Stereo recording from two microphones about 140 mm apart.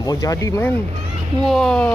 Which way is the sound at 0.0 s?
25° left (ahead or behind).